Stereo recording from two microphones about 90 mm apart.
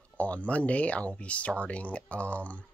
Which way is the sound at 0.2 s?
15° left (ahead or behind).